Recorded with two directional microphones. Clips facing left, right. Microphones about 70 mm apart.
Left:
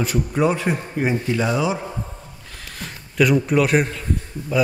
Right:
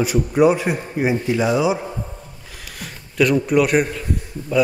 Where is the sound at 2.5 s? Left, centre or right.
Centre.